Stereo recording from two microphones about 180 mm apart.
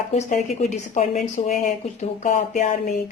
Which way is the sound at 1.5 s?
45° left (ahead or behind).